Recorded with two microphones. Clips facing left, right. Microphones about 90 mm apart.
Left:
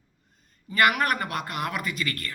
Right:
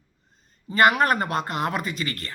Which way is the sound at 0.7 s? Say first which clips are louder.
Right 4 dB; 30° right (ahead or behind).